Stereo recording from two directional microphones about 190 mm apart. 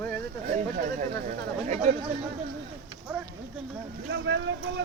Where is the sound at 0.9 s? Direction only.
40° right (ahead or behind).